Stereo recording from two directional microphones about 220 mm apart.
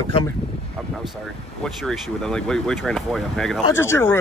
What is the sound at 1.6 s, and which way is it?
A man's voice, centre (ahead or behind).